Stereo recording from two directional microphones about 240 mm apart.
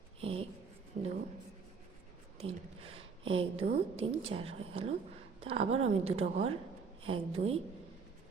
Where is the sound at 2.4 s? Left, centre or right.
Right.